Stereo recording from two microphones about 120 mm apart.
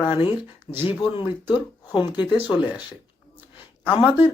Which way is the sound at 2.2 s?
10° right (ahead or behind).